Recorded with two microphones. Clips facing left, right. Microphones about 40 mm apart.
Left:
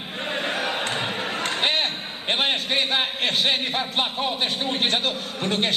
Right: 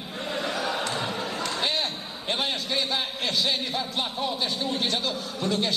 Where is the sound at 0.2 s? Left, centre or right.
Left.